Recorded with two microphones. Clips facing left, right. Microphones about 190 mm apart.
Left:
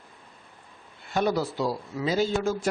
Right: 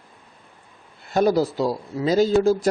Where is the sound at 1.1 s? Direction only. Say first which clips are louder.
Right 7 dB; 40° right (ahead or behind).